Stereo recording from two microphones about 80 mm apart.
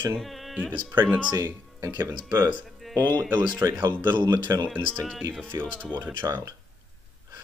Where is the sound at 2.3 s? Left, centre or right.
Right.